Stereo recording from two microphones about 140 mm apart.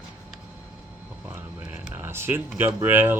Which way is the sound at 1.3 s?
15° right (ahead or behind).